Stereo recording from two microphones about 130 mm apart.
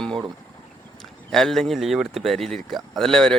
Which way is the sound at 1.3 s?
5° left (ahead or behind).